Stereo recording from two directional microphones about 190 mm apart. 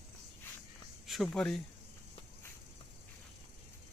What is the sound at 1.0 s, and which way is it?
Speech, centre (ahead or behind).